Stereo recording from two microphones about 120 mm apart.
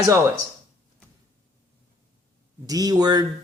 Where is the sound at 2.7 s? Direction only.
30° right (ahead or behind).